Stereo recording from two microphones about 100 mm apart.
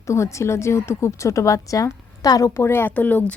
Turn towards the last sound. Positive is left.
turn(degrees=15)  # may be behind; listen again after turning